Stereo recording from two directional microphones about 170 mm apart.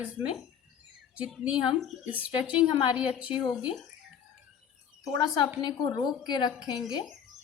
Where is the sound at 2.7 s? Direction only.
30° left (ahead or behind).